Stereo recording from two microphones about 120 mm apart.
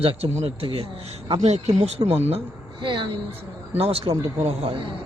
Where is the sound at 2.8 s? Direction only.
40° right (ahead or behind).